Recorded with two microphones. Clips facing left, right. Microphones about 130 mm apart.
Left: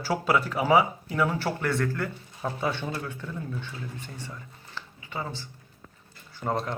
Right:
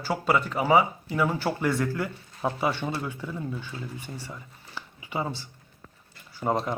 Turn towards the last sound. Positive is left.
turn(degrees=-15)  # may be behind; listen again after turning